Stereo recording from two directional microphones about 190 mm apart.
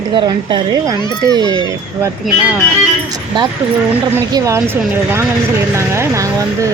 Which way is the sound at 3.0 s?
20° right (ahead or behind).